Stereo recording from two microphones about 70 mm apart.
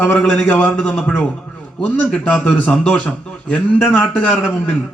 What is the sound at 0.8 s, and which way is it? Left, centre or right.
Mantra, centre.